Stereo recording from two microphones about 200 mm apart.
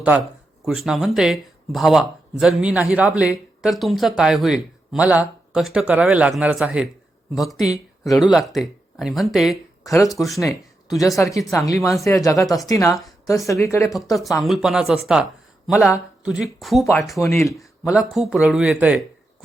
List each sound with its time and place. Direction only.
0.6 s speech: 5° right (ahead or behind)
9.8 s speech: 15° left (ahead or behind)
10.1 s speech: centre (ahead or behind)
11.2 s speech: 15° left (ahead or behind)
14.4 s speech: centre (ahead or behind)
17.1 s speech: 15° left (ahead or behind)
17.6 s speech: centre (ahead or behind)